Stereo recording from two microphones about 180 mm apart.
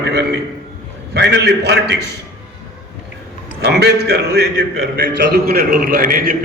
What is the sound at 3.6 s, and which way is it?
A man's voice, 70° right (ahead or behind).